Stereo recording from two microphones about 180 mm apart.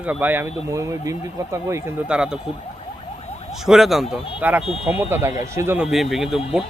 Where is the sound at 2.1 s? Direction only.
5° right (ahead or behind).